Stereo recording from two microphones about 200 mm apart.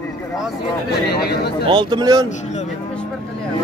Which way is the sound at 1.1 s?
55° left (ahead or behind).